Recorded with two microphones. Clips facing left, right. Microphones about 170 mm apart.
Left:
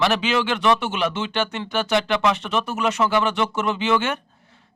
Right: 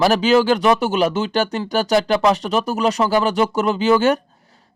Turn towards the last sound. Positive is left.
turn(degrees=-40)  # may be behind; listen again after turning